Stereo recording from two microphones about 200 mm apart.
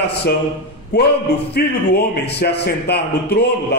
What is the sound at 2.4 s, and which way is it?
Speech, 50° left (ahead or behind).